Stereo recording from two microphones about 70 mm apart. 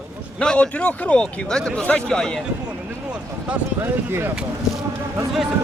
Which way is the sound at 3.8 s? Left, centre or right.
Right.